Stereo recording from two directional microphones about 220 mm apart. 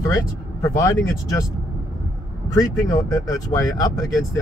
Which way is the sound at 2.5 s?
15° left (ahead or behind).